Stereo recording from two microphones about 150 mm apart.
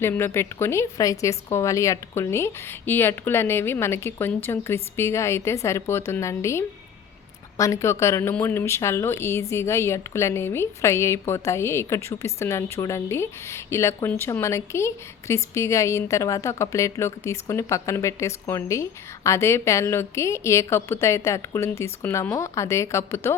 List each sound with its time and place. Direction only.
0.0 s a woman's voice: 15° left (ahead or behind)